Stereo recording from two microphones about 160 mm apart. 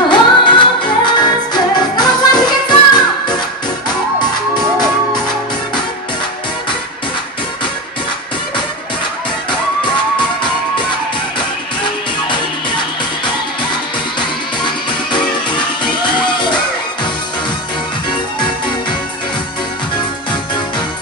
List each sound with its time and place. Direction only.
0.1 s music: 30° left (ahead or behind)
14.6 s music: 30° left (ahead or behind)